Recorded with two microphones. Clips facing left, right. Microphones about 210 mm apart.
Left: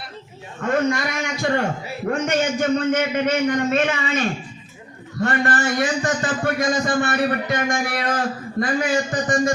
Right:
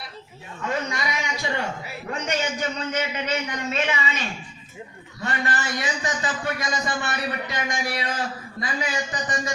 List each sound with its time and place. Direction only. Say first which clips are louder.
0.6 s a man's voice: left 8 dB; 50° left (ahead or behind)